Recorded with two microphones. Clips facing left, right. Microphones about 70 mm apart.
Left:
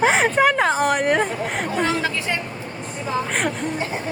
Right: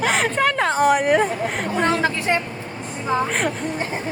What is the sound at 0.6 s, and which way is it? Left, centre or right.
Speech, centre.